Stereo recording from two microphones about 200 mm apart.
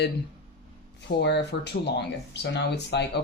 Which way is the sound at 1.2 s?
60° left (ahead or behind).